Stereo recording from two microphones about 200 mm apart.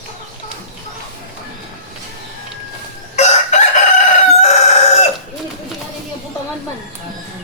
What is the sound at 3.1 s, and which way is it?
Chicken, 35° left (ahead or behind).